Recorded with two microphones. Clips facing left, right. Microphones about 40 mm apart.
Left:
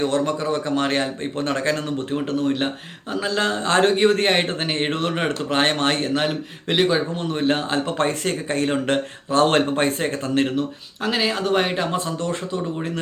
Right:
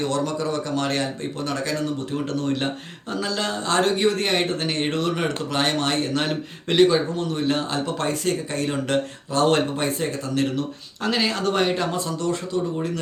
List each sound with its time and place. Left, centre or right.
0.0 s speech: left
2.1 s speech: left
3.2 s speech: left
6.1 s speech: centre
7.2 s speech: left
11.0 s speech: centre
11.9 s speech: left